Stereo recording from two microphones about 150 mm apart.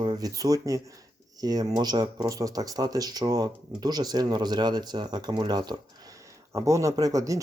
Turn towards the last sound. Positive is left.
turn(degrees=-20)  # may be behind; listen again after turning